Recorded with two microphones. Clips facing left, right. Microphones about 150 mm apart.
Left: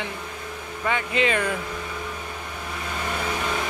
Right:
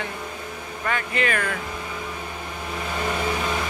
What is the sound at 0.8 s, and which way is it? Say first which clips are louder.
Speech: left 2 dB; 20° left (ahead or behind).